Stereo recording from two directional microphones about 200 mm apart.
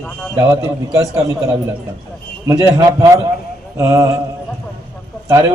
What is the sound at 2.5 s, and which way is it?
A man's voice, 15° right (ahead or behind).